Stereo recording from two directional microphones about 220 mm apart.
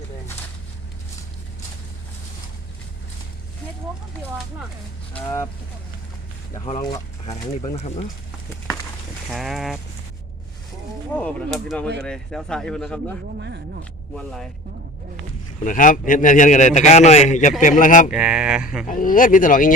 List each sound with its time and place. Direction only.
6.7 s speech: 25° left (ahead or behind)
9.3 s speech: centre (ahead or behind)
11.2 s speech: 5° left (ahead or behind)
13.4 s a sound: 50° right (ahead or behind)
14.2 s speech: centre (ahead or behind)
15.6 s a man's voice: 35° left (ahead or behind)
18.1 s speech: 5° right (ahead or behind)
18.9 s a man's voice: 40° left (ahead or behind)